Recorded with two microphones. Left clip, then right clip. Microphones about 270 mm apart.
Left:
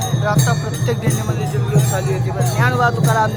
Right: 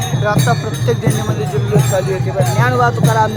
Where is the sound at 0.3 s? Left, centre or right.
Centre.